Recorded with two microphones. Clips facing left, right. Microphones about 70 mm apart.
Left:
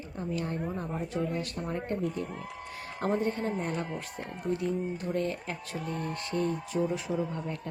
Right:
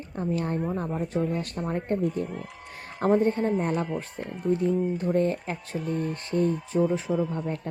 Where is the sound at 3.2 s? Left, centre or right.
Right.